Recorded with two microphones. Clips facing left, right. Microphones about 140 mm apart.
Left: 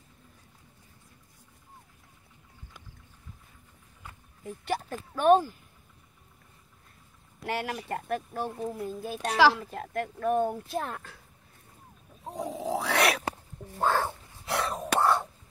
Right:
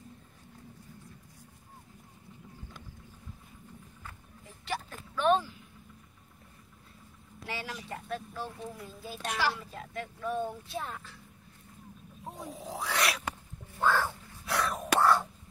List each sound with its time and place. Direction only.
4.5 s speech: 45° left (ahead or behind)
7.4 s speech: 55° left (ahead or behind)
12.4 s a sound: 80° left; by 13.2 s 65° left (ahead or behind)
13.7 s a sound: 35° left (ahead or behind)
14.0 s dog: 25° left (ahead or behind)
15.0 s whispering: 25° left (ahead or behind)